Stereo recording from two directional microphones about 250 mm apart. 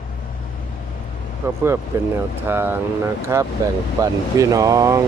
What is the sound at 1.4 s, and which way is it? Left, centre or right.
Speech, centre.